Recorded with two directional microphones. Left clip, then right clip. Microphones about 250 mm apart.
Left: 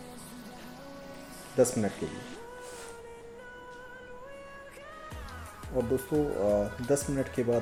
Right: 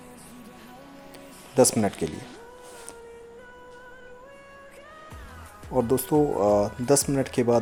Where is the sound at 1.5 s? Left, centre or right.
Right.